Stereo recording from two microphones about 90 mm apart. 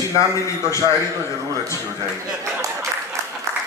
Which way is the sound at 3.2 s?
35° right (ahead or behind).